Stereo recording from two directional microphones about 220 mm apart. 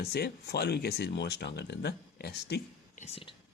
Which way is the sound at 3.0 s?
25° left (ahead or behind).